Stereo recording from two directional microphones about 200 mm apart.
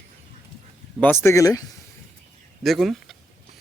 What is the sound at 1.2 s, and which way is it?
Speech, 15° left (ahead or behind).